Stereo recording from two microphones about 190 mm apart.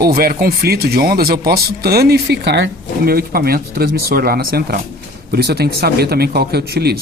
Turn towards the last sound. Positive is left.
turn(degrees=-55)  # may be behind; listen again after turning